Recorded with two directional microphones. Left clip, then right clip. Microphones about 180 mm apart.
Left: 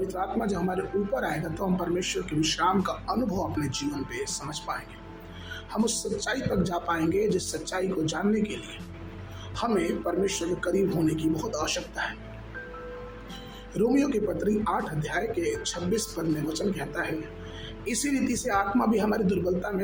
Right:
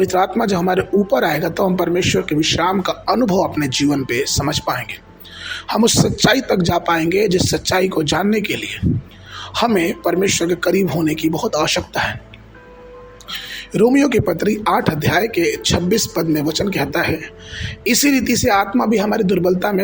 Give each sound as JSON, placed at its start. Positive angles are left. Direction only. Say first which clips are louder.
{"t": 0.1, "sound": "speech", "louder": "right 13 dB", "side_deg": -50}
{"t": 9.6, "sound": "speech", "louder": "right 10 dB", "side_deg": -45}
{"t": 13.7, "sound": "speech", "louder": "right 11 dB", "side_deg": -45}